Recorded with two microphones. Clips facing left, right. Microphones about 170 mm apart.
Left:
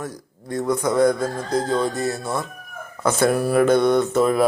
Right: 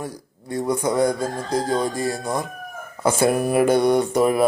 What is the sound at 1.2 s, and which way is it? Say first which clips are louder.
Speech: left 1 dB; 10° right (ahead or behind).